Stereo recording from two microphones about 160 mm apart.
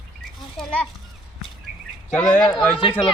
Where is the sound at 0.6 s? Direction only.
5° left (ahead or behind).